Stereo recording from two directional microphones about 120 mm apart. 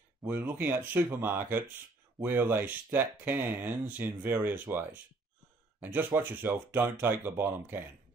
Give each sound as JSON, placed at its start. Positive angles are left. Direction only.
{"t": 0.2, "sound": "speech", "side_deg": -15}